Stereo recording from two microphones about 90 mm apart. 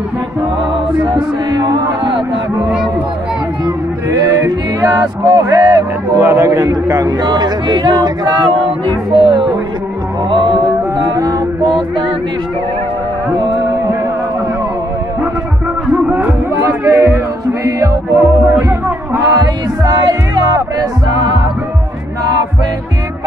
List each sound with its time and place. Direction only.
1.5 s speech: 60° right (ahead or behind)
3.6 s a sound: 45° right (ahead or behind)
4.8 s music: 50° right (ahead or behind)
6.1 s a man's voice: 30° right (ahead or behind)
7.1 s speech: 50° right (ahead or behind)
9.1 s music: 65° right (ahead or behind)
11.1 s music: 40° right (ahead or behind)
15.9 s music: 15° right (ahead or behind)
16.5 s music: 30° right (ahead or behind)
19.4 s music: 50° right (ahead or behind)